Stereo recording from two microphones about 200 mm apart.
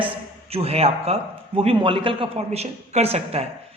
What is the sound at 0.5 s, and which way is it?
A man's voice, 30° right (ahead or behind).